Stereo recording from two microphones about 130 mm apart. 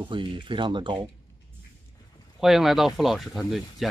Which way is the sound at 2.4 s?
Centre (ahead or behind).